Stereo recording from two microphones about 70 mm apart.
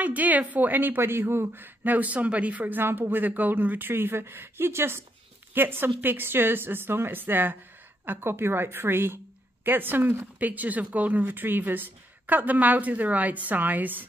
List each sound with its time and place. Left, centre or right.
0.0 s a woman's voice: right